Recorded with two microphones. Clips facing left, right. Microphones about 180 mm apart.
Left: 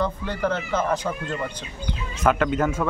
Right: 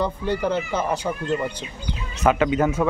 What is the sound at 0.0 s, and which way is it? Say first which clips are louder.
Speech: right 2 dB; 15° right (ahead or behind).